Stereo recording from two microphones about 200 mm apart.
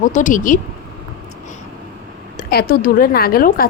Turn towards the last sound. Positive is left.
turn(degrees=50)  # may be behind; listen again after turning